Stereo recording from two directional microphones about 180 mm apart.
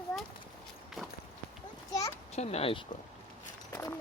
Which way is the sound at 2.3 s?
35° left (ahead or behind).